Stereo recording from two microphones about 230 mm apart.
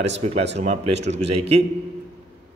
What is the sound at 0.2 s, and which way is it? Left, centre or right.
A man's voice, right.